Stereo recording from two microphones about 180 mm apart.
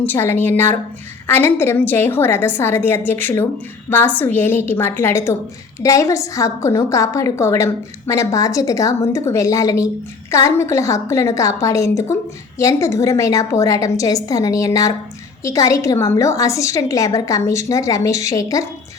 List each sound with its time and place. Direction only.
0.0 s a woman's voice: 10° left (ahead or behind)